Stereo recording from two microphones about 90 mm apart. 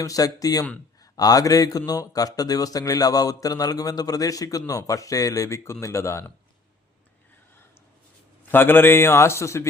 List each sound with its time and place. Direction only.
0.0 s speech: 40° left (ahead or behind)
8.4 s a man's voice: 25° left (ahead or behind)